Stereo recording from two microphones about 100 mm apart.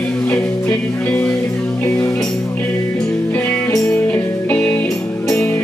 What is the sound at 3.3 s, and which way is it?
Music, 20° left (ahead or behind).